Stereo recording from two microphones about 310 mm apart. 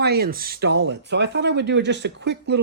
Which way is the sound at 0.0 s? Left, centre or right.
Right.